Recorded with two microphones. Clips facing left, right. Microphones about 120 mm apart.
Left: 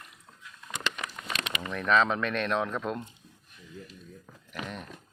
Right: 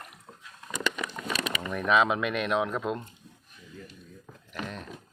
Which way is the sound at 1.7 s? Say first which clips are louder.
Right 1 dB; 10° right (ahead or behind).